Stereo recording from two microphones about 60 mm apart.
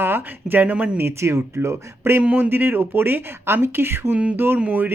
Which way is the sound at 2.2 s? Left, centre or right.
Right.